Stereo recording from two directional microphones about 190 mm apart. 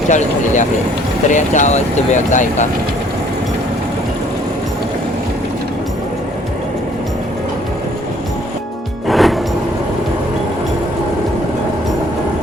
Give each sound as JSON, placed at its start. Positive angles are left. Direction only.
{"t": 0.1, "sound": "speech", "side_deg": 40}
{"t": 9.0, "sound": "music", "side_deg": 0}